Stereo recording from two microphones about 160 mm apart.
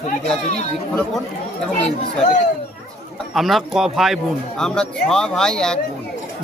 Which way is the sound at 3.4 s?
Centre (ahead or behind).